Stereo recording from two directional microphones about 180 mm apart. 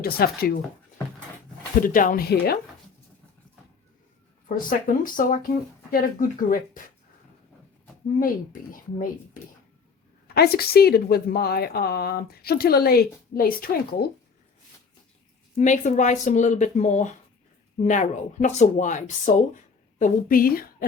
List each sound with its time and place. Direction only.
0.0 s a woman's voice: 55° left (ahead or behind)
1.8 s speech: 50° left (ahead or behind)
4.4 s speech: 50° left (ahead or behind)
8.7 s speech: 50° left (ahead or behind)
10.3 s a woman's voice: 60° left (ahead or behind)
15.5 s speech: 45° left (ahead or behind)